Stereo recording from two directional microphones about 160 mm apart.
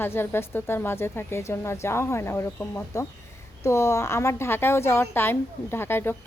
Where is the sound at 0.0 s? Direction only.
15° left (ahead or behind).